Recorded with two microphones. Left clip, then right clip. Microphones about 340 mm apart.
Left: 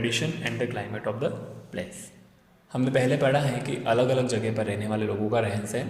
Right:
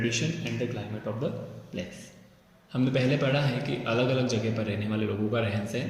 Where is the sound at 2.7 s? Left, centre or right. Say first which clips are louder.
Left 3 dB; centre.